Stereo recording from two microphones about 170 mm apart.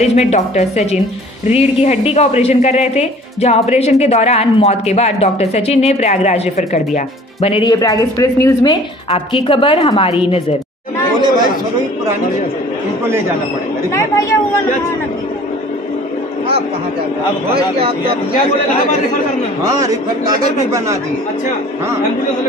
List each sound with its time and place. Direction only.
0.0 s a woman's voice: 40° left (ahead or behind)
7.8 s a woman's voice: 20° left (ahead or behind)
9.1 s a woman's voice: 30° left (ahead or behind)
11.1 s speech: 25° right (ahead or behind)
19.7 s speech: 20° right (ahead or behind)